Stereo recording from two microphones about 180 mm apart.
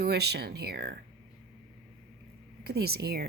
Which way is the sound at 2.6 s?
60° right (ahead or behind).